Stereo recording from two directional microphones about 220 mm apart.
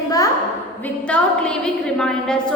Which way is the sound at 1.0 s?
5° left (ahead or behind).